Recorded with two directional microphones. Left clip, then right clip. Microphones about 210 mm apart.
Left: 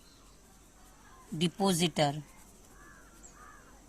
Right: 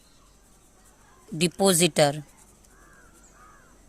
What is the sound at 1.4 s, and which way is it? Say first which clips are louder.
Speech: right 9 dB; 45° right (ahead or behind).